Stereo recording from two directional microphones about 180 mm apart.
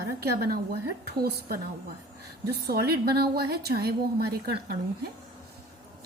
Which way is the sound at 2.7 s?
60° right (ahead or behind).